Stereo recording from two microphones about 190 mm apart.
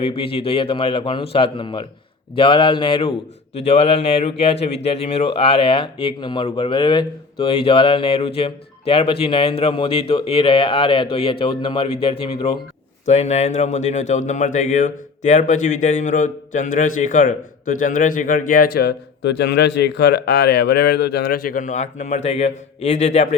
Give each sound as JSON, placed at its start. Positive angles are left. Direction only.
{"t": 0.0, "sound": "speech", "side_deg": 30}